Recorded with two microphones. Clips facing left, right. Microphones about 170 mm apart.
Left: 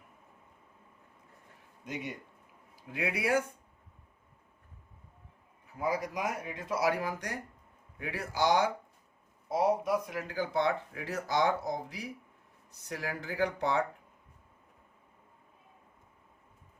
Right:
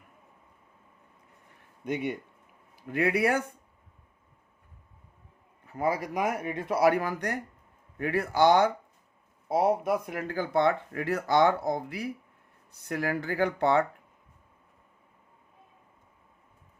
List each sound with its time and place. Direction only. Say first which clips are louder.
1.8 s speech: right 8 dB; 60° right (ahead or behind)
5.7 s speech: right 4 dB; 60° right (ahead or behind)